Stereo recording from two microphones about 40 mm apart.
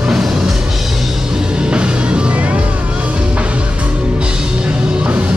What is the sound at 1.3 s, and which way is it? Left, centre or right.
Music, right.